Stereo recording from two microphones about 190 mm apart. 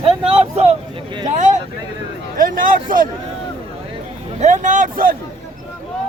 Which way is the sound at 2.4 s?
45° right (ahead or behind).